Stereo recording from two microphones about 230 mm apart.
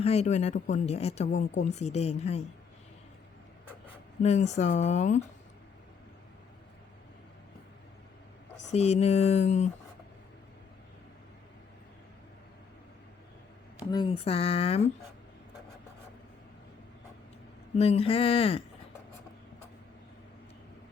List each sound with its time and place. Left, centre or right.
0.0 s speech: left
4.2 s speech: left
8.7 s speech: left
13.9 s speech: left
17.7 s speech: left